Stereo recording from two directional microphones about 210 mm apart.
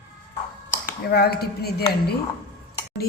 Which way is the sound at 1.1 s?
50° left (ahead or behind).